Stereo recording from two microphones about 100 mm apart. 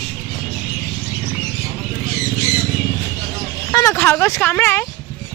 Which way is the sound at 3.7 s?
30° left (ahead or behind).